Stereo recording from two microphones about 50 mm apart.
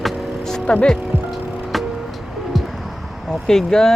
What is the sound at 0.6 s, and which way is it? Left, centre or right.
Speech, left.